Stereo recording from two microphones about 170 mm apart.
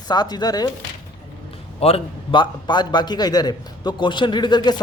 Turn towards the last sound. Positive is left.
turn(degrees=25)  # may be behind; listen again after turning